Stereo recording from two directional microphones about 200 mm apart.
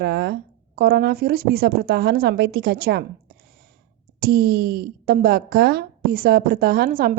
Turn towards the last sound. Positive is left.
turn(degrees=-50)  # may be behind; listen again after turning